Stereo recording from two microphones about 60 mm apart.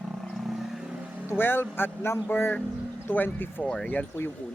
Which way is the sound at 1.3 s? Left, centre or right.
Left.